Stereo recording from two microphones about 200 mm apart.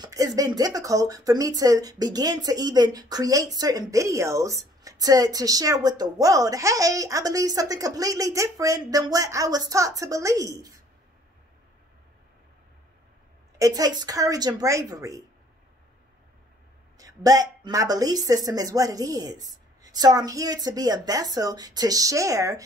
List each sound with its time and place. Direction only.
0.0 s speech: 15° right (ahead or behind)
13.6 s speech: 20° right (ahead or behind)
17.0 s speech: 20° right (ahead or behind)